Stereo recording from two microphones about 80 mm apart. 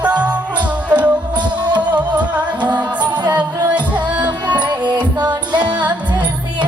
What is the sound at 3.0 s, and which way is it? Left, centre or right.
Music, right.